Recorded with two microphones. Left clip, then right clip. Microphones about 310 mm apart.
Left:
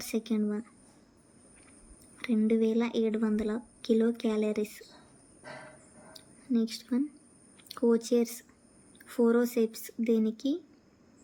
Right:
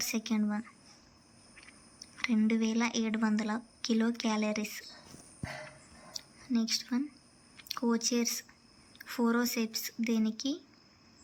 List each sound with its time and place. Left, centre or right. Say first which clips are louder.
0.0 s a woman's voice: left 1 dB; centre
2.1 s a woman's voice: left 3 dB; centre
6.1 s a sound: left 3 dB; centre
7.5 s speech: left 6 dB; centre